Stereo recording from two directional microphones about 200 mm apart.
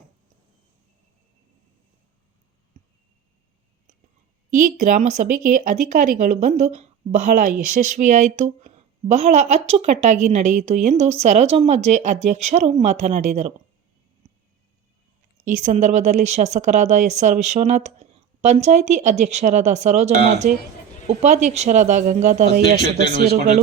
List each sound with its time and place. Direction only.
4.5 s a woman's voice: 40° right (ahead or behind)
15.4 s a woman's voice: 40° right (ahead or behind)